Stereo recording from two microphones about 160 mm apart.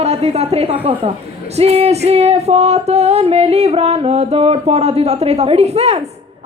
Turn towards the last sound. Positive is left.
turn(degrees=-40)  # may be behind; listen again after turning